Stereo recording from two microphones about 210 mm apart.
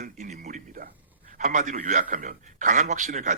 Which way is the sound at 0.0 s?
35° right (ahead or behind).